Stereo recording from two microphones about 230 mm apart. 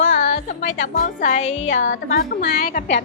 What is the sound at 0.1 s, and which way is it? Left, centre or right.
Speech, left.